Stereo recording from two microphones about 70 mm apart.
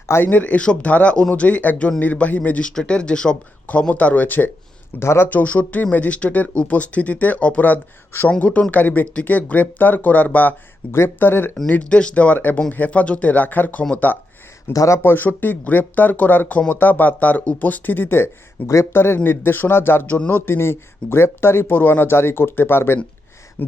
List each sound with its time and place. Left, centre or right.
0.3 s speech: left
2.6 s speech: centre
4.9 s speech: left
5.3 s speech: left
8.3 s speech: centre
11.7 s speech: centre
14.7 s speech: left
15.0 s speech: left